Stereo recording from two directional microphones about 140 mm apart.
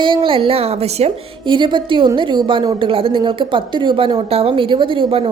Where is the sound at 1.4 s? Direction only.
35° right (ahead or behind).